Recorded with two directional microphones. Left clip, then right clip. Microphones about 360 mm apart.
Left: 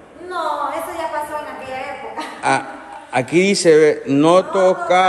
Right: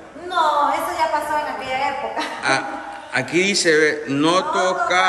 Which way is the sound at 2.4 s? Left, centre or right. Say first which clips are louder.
Left 4 dB; centre.